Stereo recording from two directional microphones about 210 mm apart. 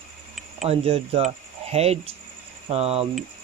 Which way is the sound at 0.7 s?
30° right (ahead or behind).